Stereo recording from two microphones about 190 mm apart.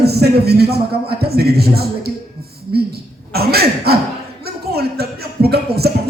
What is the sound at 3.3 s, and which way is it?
Speech, 55° right (ahead or behind).